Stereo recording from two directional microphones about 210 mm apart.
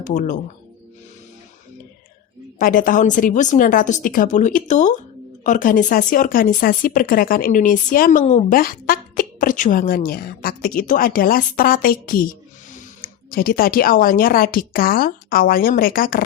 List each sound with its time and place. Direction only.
0.0 s speech: 40° left (ahead or behind)
2.6 s speech: 40° left (ahead or behind)